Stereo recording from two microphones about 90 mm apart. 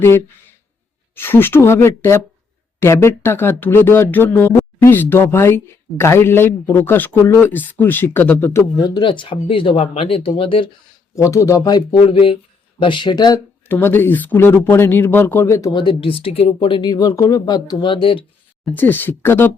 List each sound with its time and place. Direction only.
1.1 s speech: 25° left (ahead or behind)
8.8 s speech: 50° left (ahead or behind)
9.0 s speech: 70° left (ahead or behind)
11.1 s speech: 35° left (ahead or behind)
11.6 s speech: 50° left (ahead or behind)
11.9 s speech: 80° left
12.8 s speech: 65° left (ahead or behind); by 13.4 s 50° left (ahead or behind)
13.7 s speech: 25° left (ahead or behind)
15.4 s speech: 35° left (ahead or behind)
15.7 s speech: 65° left (ahead or behind)
16.9 s speech: 40° left (ahead or behind); by 18.3 s 75° left (ahead or behind)
18.7 s speech: 20° left (ahead or behind)